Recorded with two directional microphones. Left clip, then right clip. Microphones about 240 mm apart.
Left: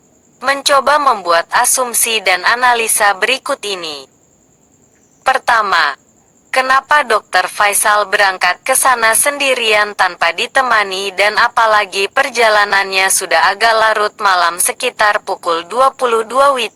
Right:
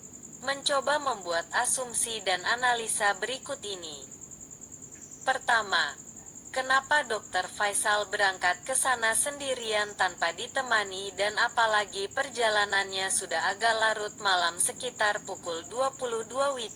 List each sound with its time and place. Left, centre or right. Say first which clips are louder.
0.4 s a woman's voice: left 16 dB; left
5.3 s a woman's voice: left 14 dB; left